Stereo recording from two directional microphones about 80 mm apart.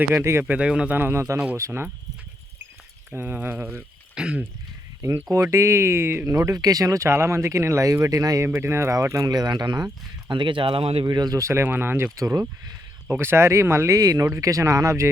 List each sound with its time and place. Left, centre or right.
0.1 s speech: right
0.5 s speech: centre
0.9 s speech: right
3.1 s speech: right
4.1 s speech: centre
5.3 s speech: right
8.4 s speech: right
9.3 s speech: right
10.3 s speech: right
11.0 s speech: right
11.3 s speech: right
12.1 s speech: right
13.1 s speech: right